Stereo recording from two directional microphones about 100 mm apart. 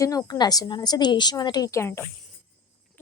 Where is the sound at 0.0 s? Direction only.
35° left (ahead or behind).